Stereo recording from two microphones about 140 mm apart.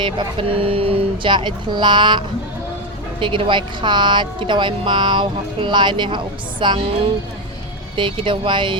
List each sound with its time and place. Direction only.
0.0 s speech: 40° right (ahead or behind)